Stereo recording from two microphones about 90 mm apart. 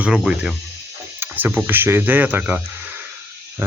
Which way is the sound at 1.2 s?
20° right (ahead or behind).